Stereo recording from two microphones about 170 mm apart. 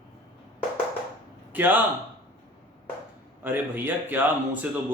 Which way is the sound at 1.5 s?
10° right (ahead or behind).